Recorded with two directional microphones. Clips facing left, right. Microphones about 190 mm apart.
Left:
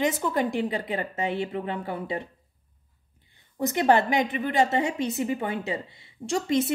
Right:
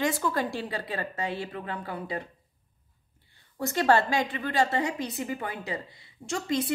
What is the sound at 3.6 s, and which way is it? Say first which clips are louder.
A woman's voice: left 2 dB; 20° left (ahead or behind).